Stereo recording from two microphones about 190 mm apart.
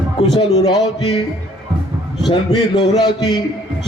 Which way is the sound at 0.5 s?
20° left (ahead or behind).